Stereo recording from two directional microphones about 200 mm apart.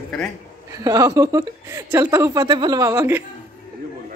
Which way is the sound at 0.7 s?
15° right (ahead or behind).